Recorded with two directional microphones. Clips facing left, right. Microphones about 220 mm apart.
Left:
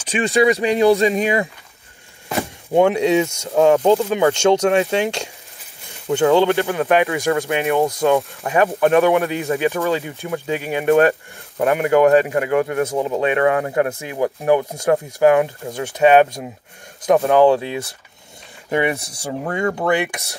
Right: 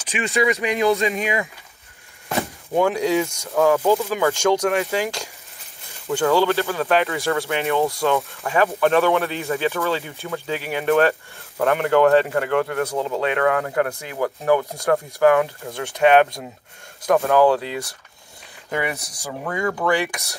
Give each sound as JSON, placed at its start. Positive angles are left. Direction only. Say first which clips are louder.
{"t": 0.0, "sound": "speech", "louder": "left 5 dB", "side_deg": 35}
{"t": 2.7, "sound": "speech", "louder": "left 4 dB", "side_deg": 25}